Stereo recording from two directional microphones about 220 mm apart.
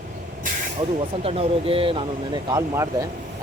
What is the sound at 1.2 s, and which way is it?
Speech, 25° right (ahead or behind).